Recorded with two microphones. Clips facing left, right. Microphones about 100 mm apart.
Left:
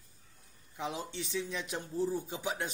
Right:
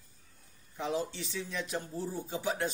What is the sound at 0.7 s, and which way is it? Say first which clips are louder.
Speech: right 4 dB; 10° left (ahead or behind).